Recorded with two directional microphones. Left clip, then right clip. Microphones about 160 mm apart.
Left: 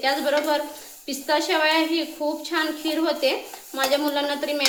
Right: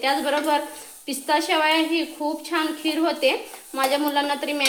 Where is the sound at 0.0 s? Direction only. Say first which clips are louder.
Even; 30° right (ahead or behind).